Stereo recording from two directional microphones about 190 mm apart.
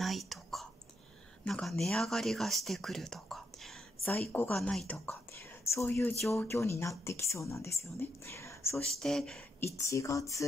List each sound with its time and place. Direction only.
0.0 s whispering: centre (ahead or behind)
1.4 s speech: centre (ahead or behind)
9.0 s speech: 5° left (ahead or behind)
9.8 s speech: 15° left (ahead or behind)